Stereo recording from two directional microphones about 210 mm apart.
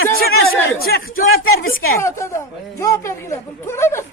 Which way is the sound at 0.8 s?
45° left (ahead or behind).